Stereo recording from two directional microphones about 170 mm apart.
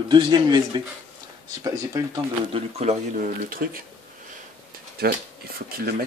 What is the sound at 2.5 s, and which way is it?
Speech, 40° right (ahead or behind).